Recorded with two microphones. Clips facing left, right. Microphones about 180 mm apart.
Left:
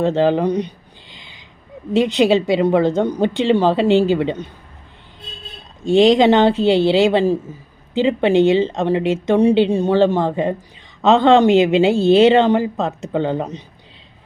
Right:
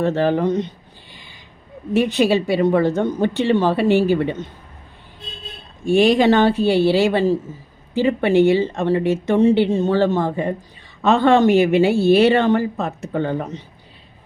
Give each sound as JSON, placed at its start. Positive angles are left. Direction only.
{"t": 0.0, "sound": "speech", "side_deg": 15}
{"t": 1.1, "sound": "a sound", "side_deg": 15}
{"t": 1.9, "sound": "speech", "side_deg": 15}
{"t": 5.8, "sound": "speech", "side_deg": 20}